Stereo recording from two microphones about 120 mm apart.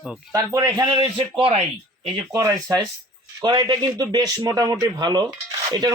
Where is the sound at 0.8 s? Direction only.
40° right (ahead or behind).